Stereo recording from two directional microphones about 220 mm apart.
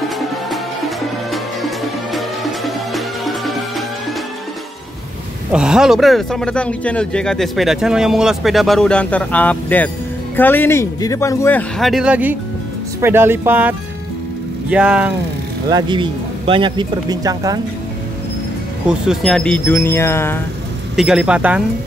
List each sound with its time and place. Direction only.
0.5 s music: centre (ahead or behind)
5.5 s speech: 5° right (ahead or behind)
15.7 s speech: 20° right (ahead or behind)
18.9 s speech: centre (ahead or behind)
20.9 s speech: 5° right (ahead or behind)